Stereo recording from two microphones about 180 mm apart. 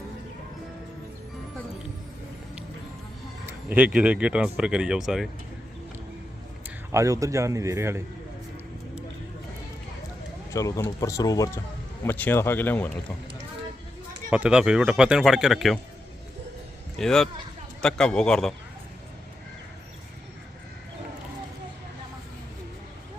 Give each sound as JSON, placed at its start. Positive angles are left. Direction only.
{"t": 3.4, "sound": "speech", "side_deg": -10}
{"t": 6.9, "sound": "a man's voice", "side_deg": -15}
{"t": 10.5, "sound": "speech", "side_deg": 15}
{"t": 14.3, "sound": "speech", "side_deg": -5}
{"t": 17.0, "sound": "speech", "side_deg": 0}